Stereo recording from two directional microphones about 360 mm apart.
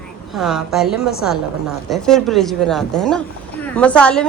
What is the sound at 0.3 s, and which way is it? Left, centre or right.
A woman's voice, centre.